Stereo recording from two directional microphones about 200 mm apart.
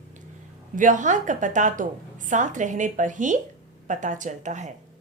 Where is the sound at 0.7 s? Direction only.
40° right (ahead or behind).